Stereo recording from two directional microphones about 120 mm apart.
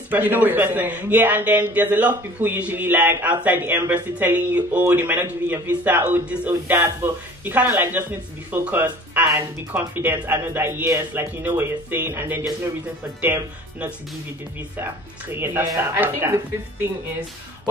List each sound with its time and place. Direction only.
0.1 s a man's voice: 15° right (ahead or behind)